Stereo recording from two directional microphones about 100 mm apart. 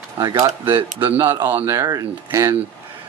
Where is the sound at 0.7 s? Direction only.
60° right (ahead or behind).